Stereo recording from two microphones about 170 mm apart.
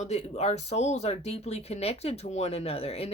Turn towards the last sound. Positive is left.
turn(degrees=35)  # may be behind; listen again after turning